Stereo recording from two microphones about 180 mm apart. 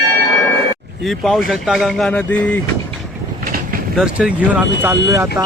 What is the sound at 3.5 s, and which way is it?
Vehicle, 50° right (ahead or behind).